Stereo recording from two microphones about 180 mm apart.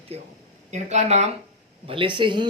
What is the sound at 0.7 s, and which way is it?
Speech, 40° right (ahead or behind).